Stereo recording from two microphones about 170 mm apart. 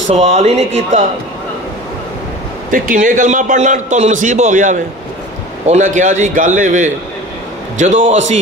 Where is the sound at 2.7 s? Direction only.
50° right (ahead or behind).